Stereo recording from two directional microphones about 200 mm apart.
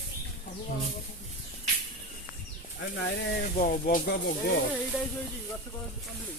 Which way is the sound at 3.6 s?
40° left (ahead or behind).